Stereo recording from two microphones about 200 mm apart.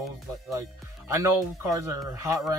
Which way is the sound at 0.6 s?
15° right (ahead or behind).